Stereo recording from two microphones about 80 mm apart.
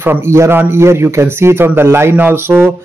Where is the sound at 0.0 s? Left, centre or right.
Right.